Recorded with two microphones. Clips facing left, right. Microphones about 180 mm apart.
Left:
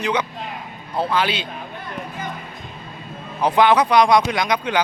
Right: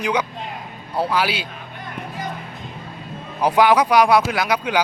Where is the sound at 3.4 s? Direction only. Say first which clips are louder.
Even; 10° right (ahead or behind).